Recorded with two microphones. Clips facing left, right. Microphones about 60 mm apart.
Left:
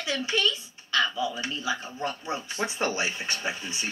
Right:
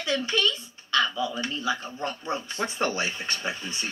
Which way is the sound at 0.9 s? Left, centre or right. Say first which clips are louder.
Right 1 dB; centre.